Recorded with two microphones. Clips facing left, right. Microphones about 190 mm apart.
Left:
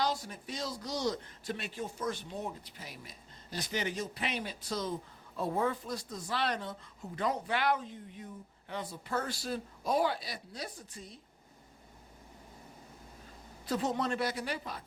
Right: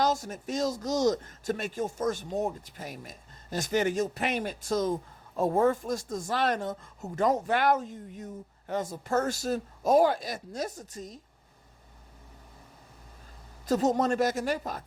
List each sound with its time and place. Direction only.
0.0 s speech: 45° right (ahead or behind)
13.7 s speech: 40° right (ahead or behind)